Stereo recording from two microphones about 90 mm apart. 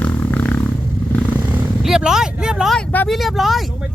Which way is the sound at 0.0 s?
15° left (ahead or behind).